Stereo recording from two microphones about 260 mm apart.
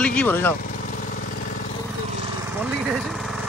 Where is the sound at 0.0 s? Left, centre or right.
Centre.